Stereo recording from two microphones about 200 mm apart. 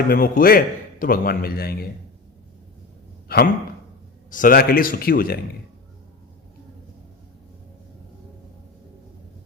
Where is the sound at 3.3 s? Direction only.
50° left (ahead or behind).